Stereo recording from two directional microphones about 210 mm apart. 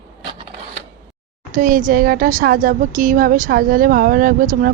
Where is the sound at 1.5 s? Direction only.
40° right (ahead or behind).